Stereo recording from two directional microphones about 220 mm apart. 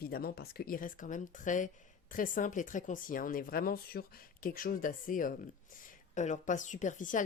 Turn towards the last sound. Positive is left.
turn(degrees=35)  # may be behind; listen again after turning